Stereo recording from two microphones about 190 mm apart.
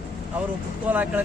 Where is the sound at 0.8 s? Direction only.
10° right (ahead or behind).